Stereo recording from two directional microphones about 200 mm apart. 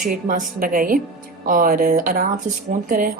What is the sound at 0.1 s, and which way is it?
A woman's voice, 45° right (ahead or behind).